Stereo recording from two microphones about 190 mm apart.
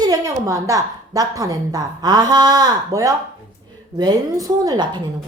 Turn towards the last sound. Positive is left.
turn(degrees=-20)  # may be behind; listen again after turning